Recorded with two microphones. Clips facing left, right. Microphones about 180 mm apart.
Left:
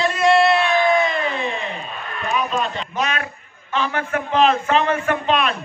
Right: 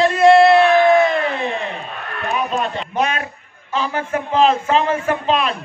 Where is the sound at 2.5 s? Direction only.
55° right (ahead or behind).